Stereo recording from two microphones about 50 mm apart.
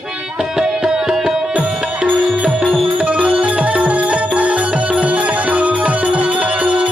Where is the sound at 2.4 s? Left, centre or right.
Right.